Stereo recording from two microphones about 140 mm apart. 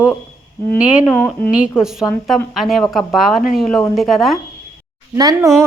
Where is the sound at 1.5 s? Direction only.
5° right (ahead or behind).